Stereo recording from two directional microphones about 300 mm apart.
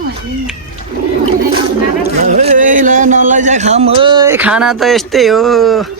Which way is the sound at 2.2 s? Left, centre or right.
Right.